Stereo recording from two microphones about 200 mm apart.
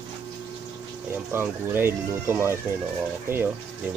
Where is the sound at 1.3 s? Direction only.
10° right (ahead or behind).